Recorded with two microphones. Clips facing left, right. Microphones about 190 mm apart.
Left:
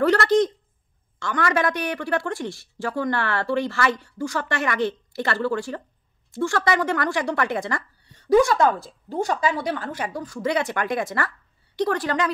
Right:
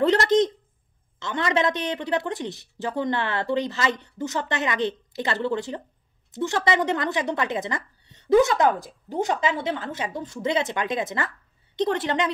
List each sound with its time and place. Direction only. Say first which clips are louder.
0.0 s a woman's voice: left 1 dB; 20° right (ahead or behind)